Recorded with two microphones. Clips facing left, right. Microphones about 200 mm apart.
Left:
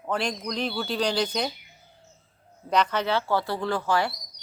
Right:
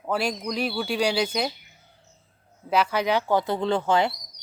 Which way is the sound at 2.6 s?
5° right (ahead or behind).